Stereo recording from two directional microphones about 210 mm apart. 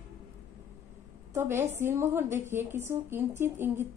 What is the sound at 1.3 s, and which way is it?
Speech, 10° right (ahead or behind).